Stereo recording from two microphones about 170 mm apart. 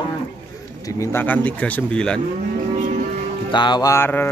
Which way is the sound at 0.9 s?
10° left (ahead or behind).